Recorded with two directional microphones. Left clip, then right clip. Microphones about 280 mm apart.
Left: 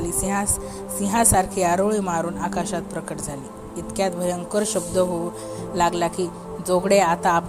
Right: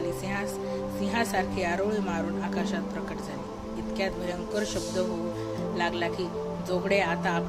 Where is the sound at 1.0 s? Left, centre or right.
Left.